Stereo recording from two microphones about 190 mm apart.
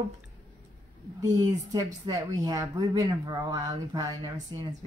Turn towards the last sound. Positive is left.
turn(degrees=-20)  # may be behind; listen again after turning